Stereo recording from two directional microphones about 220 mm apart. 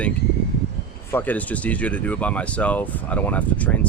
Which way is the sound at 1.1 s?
5° left (ahead or behind).